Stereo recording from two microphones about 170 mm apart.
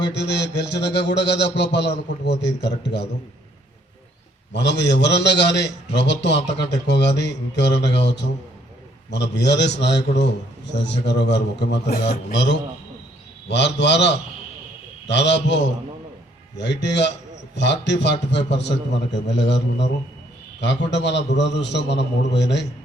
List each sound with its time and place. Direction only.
0.1 s a man's voice: 85° left
4.5 s a man's voice: 90° left
12.3 s a man's voice: 90° left
16.6 s a man's voice: 90° left